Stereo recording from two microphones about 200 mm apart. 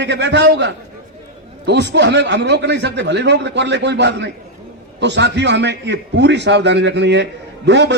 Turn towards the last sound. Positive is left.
turn(degrees=-60)  # may be behind; listen again after turning